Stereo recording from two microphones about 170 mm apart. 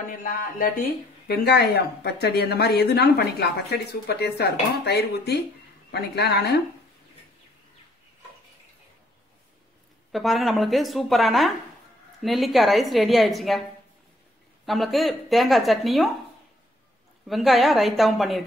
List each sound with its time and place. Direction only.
0.2 s speech: 55° left (ahead or behind); by 6.6 s 70° left (ahead or behind)
10.1 s a woman's voice: centre (ahead or behind)
14.7 s a woman's voice: centre (ahead or behind)
17.3 s a woman's voice: centre (ahead or behind)